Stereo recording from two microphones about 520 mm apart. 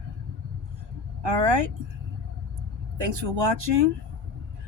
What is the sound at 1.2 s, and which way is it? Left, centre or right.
Speech, right.